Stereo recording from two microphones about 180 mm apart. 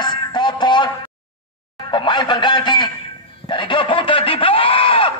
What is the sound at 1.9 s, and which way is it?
A man's voice, 25° left (ahead or behind).